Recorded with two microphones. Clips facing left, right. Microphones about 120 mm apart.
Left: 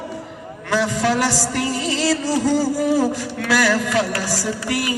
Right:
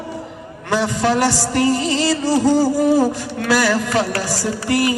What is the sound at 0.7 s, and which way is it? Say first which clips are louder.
A man's voice: right 1 dB; 25° right (ahead or behind).